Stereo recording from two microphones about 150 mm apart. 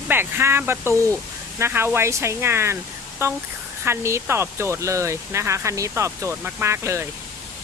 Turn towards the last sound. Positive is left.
turn(degrees=-20)  # may be behind; listen again after turning